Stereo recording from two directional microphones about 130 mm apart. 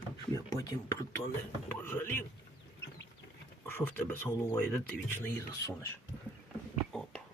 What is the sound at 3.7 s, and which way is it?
Speech, 15° left (ahead or behind).